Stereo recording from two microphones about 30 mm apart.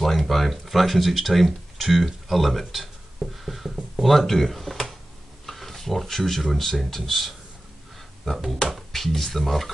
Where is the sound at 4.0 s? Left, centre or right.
Centre.